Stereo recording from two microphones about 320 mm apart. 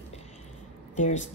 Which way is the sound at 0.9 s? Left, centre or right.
Left.